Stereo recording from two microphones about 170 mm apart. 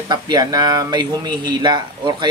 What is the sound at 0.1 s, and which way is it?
Speech, 25° right (ahead or behind).